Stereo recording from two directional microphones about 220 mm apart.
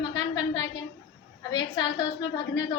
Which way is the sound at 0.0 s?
20° left (ahead or behind).